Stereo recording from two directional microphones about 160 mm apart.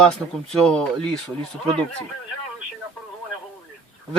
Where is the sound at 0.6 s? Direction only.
5° left (ahead or behind).